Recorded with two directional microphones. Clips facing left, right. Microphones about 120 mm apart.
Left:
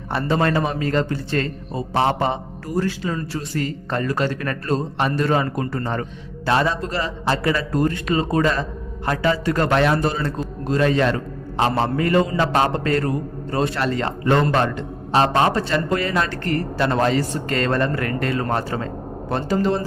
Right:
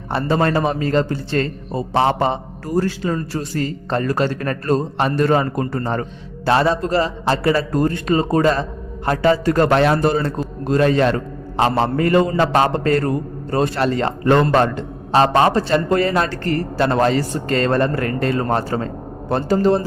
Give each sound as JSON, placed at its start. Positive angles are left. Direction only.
{"t": 0.1, "sound": "a man's voice", "side_deg": -30}